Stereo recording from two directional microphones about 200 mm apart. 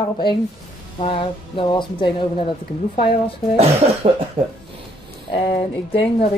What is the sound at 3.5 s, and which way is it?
Speech, 30° right (ahead or behind).